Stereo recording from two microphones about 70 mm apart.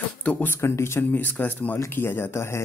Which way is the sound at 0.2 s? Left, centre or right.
Left.